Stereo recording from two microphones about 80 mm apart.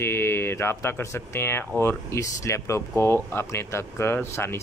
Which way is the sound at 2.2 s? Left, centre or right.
Left.